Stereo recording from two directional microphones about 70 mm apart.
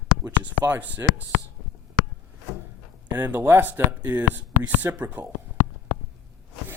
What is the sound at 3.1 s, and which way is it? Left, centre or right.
Speech, right.